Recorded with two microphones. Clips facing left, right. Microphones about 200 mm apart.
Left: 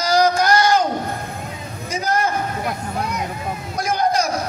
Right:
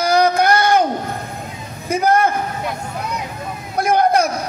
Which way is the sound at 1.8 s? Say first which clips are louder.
Right 6 dB; 55° right (ahead or behind).